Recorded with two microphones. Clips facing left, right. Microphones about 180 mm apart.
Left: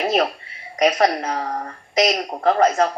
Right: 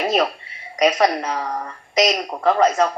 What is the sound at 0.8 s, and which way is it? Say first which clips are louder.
A woman's voice: even; 45° left (ahead or behind).